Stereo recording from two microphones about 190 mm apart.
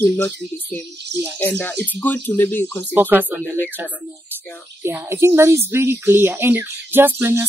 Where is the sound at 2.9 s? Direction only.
10° right (ahead or behind).